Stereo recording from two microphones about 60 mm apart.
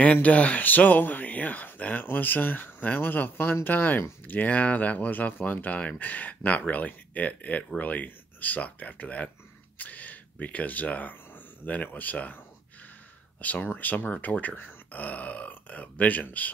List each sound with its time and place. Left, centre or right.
0.0 s speech: left
13.4 s speech: left